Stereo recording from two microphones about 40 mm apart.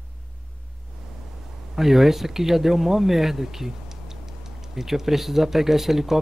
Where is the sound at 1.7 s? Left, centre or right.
Centre.